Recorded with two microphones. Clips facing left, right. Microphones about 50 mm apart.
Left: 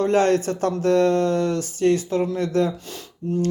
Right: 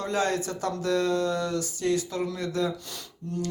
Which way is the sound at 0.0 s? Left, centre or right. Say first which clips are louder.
Left 9 dB; left.